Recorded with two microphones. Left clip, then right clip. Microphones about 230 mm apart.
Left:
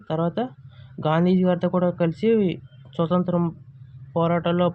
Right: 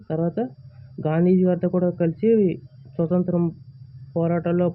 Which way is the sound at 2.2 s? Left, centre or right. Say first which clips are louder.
Right 3 dB; left.